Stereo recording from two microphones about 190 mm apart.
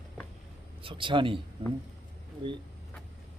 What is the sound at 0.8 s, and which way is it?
Speech, 25° right (ahead or behind).